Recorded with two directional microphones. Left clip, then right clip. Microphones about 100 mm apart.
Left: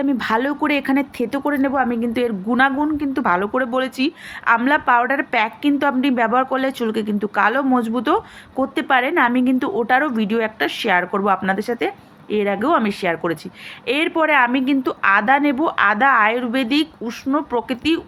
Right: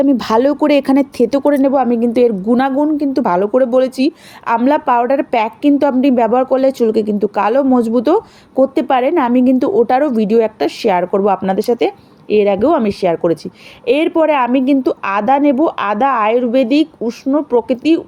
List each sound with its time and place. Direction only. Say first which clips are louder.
0.0 s a woman's voice: right 7 dB; 60° right (ahead or behind)
1.5 s a woman's voice: right 4 dB; 55° right (ahead or behind)